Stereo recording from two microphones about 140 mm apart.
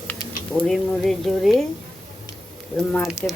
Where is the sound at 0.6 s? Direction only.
Centre (ahead or behind).